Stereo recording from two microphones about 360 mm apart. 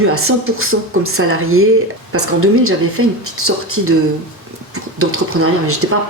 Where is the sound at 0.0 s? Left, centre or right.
Right.